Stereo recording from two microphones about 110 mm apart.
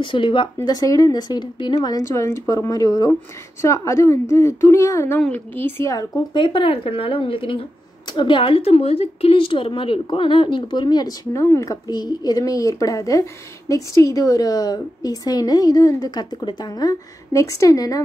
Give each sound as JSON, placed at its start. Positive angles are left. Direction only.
{"t": 0.0, "sound": "speech", "side_deg": 50}
{"t": 0.7, "sound": "a woman's voice", "side_deg": 35}
{"t": 6.3, "sound": "speech", "side_deg": 50}
{"t": 11.3, "sound": "speech", "side_deg": 25}